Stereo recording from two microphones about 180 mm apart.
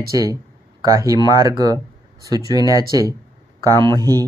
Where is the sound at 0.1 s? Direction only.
20° right (ahead or behind).